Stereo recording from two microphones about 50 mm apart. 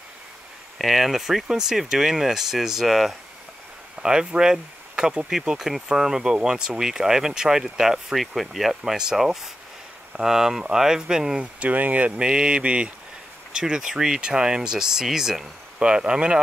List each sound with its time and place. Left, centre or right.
0.7 s speech: centre
3.9 s speech: centre
11.6 s mantra: right
12.2 s mantra: centre
13.5 s speech: centre
15.8 s mantra: centre